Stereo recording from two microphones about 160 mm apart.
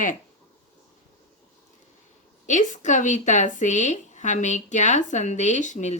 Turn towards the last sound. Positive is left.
turn(degrees=50)  # may be behind; listen again after turning